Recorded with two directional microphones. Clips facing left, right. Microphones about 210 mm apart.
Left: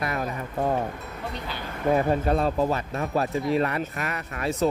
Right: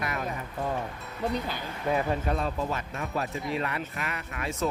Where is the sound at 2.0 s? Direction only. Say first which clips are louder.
Left 6 dB; 35° left (ahead or behind).